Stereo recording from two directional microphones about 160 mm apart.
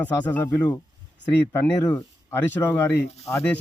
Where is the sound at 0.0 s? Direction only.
10° left (ahead or behind).